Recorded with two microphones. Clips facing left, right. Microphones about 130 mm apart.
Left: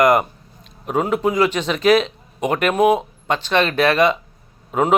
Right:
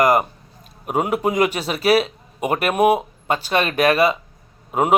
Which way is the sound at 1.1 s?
45° right (ahead or behind).